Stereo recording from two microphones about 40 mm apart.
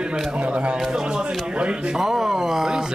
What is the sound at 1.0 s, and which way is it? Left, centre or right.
Speech, right.